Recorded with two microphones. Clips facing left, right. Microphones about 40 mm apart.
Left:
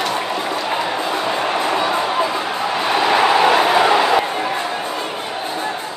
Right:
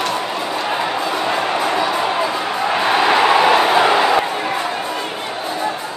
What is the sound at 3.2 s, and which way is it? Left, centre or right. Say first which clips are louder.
Crowd: left 1 dB; centre.